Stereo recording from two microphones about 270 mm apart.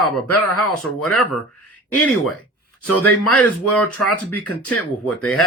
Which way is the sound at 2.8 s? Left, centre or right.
Left.